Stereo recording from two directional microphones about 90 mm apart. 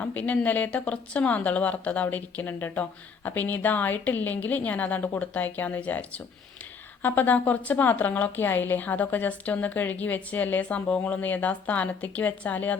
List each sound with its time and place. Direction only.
0.0 s a woman's voice: 15° left (ahead or behind)